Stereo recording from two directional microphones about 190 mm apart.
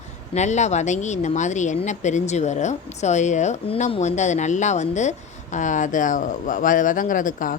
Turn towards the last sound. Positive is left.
turn(degrees=45)  # may be behind; listen again after turning